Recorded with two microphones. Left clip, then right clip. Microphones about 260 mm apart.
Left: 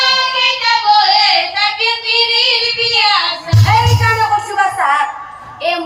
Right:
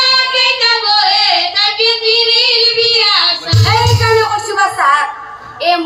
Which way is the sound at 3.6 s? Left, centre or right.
Right.